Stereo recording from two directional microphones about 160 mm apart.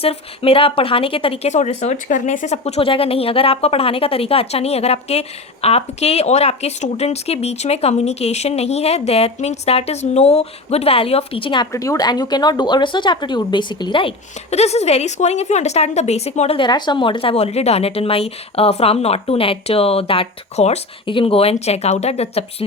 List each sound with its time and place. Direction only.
0.0 s speech: 35° left (ahead or behind)
11.7 s speech: 20° left (ahead or behind)
14.5 s speech: 45° left (ahead or behind)
16.6 s speech: 30° left (ahead or behind)